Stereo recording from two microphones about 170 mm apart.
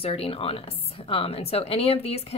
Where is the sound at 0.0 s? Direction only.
35° left (ahead or behind).